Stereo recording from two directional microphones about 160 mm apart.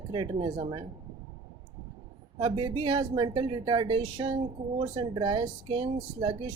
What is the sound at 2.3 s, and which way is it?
Speech, 30° right (ahead or behind).